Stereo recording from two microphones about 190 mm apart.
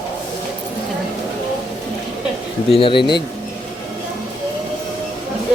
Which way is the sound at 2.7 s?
30° left (ahead or behind).